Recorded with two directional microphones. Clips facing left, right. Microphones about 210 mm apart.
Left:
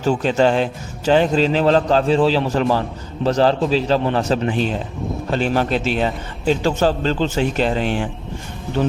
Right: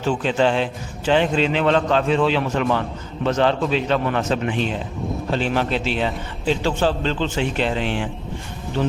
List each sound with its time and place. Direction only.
0.0 s a man's voice: 40° left (ahead or behind)